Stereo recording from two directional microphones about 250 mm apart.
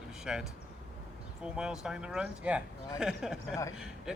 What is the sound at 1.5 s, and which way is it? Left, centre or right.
Speech, centre.